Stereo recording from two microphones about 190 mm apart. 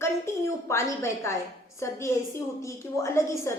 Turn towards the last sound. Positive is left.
turn(degrees=15)  # may be behind; listen again after turning